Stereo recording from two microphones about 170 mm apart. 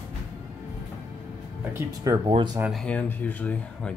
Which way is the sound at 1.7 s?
20° right (ahead or behind).